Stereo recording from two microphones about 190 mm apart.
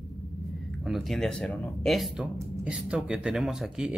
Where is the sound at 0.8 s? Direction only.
Centre (ahead or behind).